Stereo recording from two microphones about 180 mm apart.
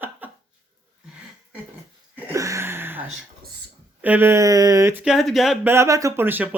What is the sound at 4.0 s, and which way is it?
Speech, 10° right (ahead or behind).